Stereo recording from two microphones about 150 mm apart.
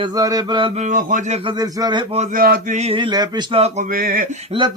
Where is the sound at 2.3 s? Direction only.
70° right (ahead or behind).